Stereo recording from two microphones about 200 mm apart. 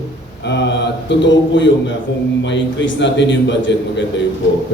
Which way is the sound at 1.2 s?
65° left (ahead or behind).